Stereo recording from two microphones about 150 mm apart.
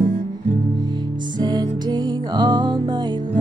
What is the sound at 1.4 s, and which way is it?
Music, 30° right (ahead or behind).